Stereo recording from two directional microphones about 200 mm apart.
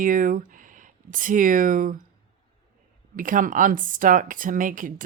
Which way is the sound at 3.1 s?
40° right (ahead or behind).